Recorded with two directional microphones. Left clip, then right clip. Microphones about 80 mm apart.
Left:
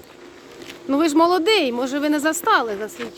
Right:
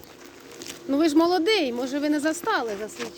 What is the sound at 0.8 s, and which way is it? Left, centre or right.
Speech, left.